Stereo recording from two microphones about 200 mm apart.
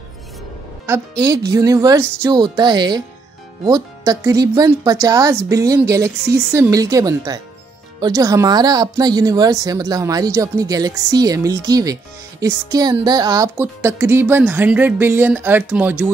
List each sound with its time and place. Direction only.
0.9 s speech: 15° right (ahead or behind)